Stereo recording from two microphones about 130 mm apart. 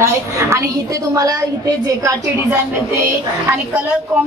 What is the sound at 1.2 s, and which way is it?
A woman's voice, 30° right (ahead or behind).